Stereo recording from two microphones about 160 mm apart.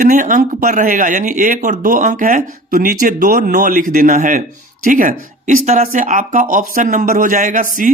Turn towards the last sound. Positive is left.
turn(degrees=-55)  # may be behind; listen again after turning